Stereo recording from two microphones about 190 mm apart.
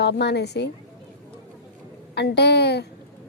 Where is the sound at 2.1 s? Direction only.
60° left (ahead or behind).